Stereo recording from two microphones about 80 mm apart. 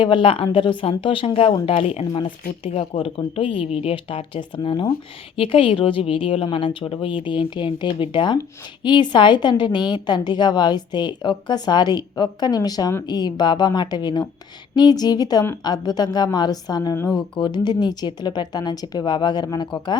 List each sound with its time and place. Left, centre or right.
0.0 s a woman's voice: left
3.2 s a woman's voice: left
17.1 s a woman's voice: left